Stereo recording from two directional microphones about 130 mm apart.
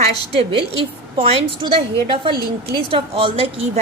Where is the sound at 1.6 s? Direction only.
40° right (ahead or behind).